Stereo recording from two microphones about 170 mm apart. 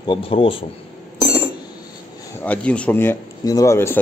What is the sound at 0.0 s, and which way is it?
Speech, 30° left (ahead or behind).